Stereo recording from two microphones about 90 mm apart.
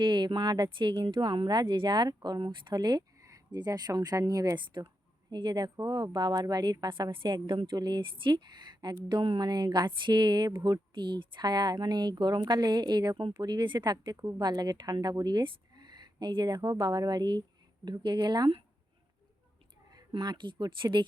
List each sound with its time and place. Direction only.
0.0 s a woman's voice: 65° right (ahead or behind)
3.2 s a sound: 35° right (ahead or behind)
3.5 s speech: 50° right (ahead or behind)
4.5 s a woman's voice: 60° right (ahead or behind)
9.0 s speech: 70° right (ahead or behind)
9.4 s a woman's voice: 50° right (ahead or behind)
19.9 s speech: 45° right (ahead or behind)